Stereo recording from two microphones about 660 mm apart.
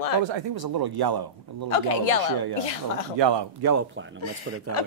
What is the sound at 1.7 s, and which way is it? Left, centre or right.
Speech, left.